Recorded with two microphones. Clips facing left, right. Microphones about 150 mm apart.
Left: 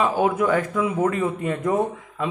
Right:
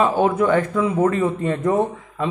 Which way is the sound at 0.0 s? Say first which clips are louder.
Right 3 dB; 10° left (ahead or behind).